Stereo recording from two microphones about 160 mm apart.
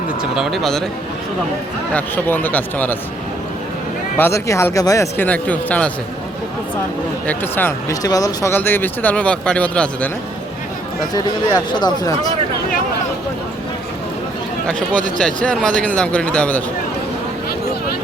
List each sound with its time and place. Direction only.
0.2 s speech: 5° right (ahead or behind)
1.9 s speech: 10° left (ahead or behind)
4.2 s speech: 20° left (ahead or behind)
7.3 s speech: 10° left (ahead or behind)
11.1 s speech: 25° left (ahead or behind)
15.2 s speech: 5° left (ahead or behind)